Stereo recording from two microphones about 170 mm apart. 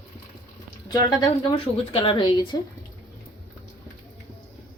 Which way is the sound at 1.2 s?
35° left (ahead or behind).